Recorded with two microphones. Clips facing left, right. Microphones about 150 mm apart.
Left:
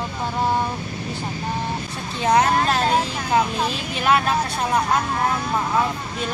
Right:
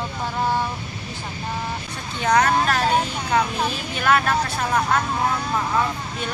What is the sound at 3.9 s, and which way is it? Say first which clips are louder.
Speech: even; 25° left (ahead or behind).